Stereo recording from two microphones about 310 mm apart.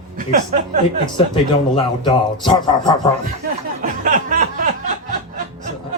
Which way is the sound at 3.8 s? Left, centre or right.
Right.